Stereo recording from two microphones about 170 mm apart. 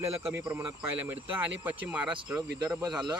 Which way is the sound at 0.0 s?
10° right (ahead or behind).